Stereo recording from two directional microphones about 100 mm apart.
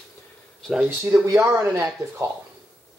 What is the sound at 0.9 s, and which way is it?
Speech, 25° right (ahead or behind).